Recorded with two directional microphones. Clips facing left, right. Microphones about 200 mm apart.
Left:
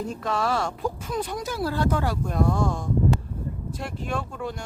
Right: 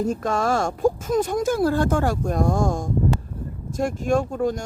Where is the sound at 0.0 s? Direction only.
45° right (ahead or behind).